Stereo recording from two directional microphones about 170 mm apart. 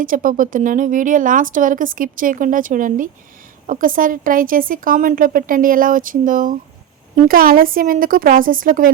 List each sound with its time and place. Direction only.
0.0 s speech: 55° right (ahead or behind)